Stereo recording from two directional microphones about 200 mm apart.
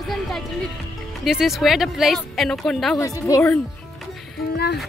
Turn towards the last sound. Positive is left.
turn(degrees=55)  # may be behind; listen again after turning